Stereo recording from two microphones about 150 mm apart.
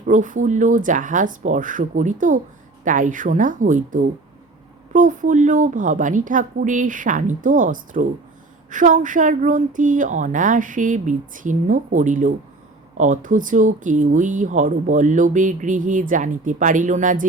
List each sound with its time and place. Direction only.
0.1 s speech: 60° right (ahead or behind)